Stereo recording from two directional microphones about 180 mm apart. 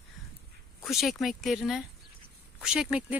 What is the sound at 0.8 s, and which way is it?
Speech, centre (ahead or behind).